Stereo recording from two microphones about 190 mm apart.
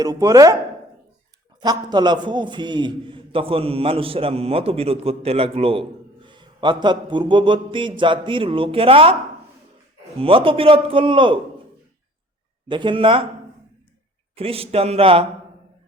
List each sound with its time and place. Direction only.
0.0 s a man's voice: 20° right (ahead or behind)
1.6 s a man's voice: 20° right (ahead or behind)
10.2 s a man's voice: 30° right (ahead or behind)
12.6 s a man's voice: 25° right (ahead or behind)
14.3 s speech: 30° right (ahead or behind)